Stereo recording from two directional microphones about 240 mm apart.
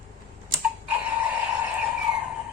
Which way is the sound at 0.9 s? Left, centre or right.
Centre.